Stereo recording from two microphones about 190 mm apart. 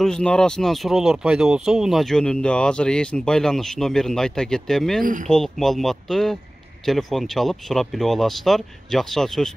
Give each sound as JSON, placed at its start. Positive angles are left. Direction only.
{"t": 0.0, "sound": "speech", "side_deg": 5}
{"t": 5.0, "sound": "speech", "side_deg": -45}
{"t": 5.3, "sound": "speech", "side_deg": 0}